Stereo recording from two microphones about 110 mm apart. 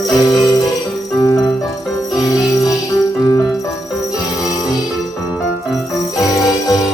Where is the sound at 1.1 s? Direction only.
30° left (ahead or behind).